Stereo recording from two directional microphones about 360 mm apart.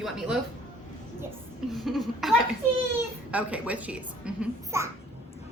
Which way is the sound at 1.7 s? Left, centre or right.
Centre.